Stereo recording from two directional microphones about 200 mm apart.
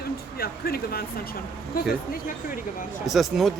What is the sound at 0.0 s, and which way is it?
Speech, 50° left (ahead or behind).